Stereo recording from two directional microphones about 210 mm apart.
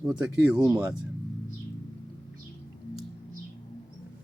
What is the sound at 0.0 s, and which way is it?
Speech, 5° right (ahead or behind).